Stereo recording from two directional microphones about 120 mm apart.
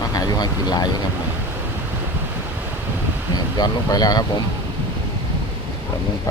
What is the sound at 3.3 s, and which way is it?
Speech, 35° left (ahead or behind).